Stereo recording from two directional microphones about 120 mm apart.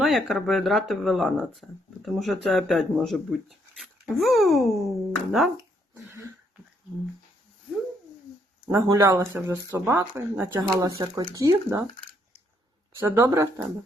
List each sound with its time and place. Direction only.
0.0 s speech: centre (ahead or behind)
6.1 s a sound: 25° right (ahead or behind)
9.0 s speech: 20° right (ahead or behind)
12.9 s speech: 20° right (ahead or behind)